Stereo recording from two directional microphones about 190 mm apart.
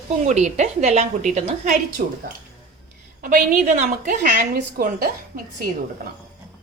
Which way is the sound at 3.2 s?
45° right (ahead or behind).